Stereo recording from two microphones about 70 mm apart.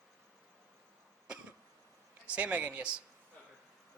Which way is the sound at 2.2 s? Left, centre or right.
Centre.